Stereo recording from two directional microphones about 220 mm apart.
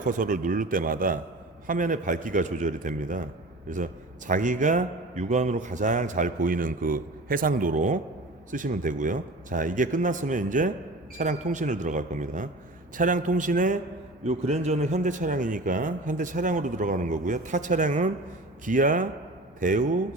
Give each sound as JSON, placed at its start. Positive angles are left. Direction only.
{"t": 0.0, "sound": "a man's voice", "side_deg": -35}
{"t": 4.3, "sound": "a man's voice", "side_deg": -35}